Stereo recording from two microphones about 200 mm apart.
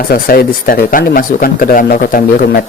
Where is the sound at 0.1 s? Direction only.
45° left (ahead or behind).